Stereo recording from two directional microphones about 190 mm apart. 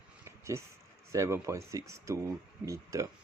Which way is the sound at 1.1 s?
15° right (ahead or behind).